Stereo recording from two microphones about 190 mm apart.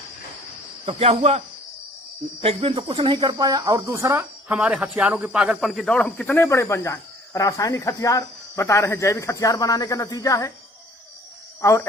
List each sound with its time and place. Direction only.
0.9 s cricket: 30° right (ahead or behind)
2.4 s speech: 30° right (ahead or behind); by 10.5 s 20° left (ahead or behind)